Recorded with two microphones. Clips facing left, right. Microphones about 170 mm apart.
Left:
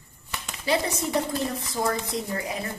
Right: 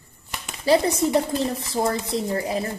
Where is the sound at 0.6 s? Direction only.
30° right (ahead or behind).